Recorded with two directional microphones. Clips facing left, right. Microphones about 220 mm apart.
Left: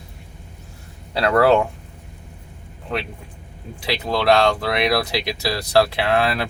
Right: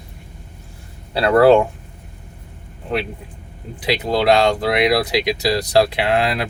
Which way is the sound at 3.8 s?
20° right (ahead or behind).